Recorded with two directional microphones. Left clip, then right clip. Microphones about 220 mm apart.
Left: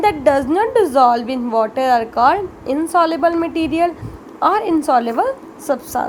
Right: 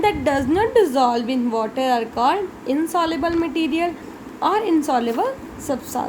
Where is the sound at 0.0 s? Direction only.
20° left (ahead or behind).